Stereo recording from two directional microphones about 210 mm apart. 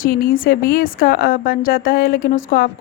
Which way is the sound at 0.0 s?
45° left (ahead or behind).